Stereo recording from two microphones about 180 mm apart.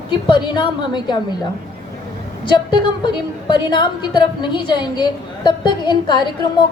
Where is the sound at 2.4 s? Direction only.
25° left (ahead or behind).